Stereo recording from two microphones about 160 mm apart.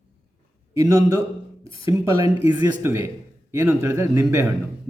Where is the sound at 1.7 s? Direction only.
35° left (ahead or behind).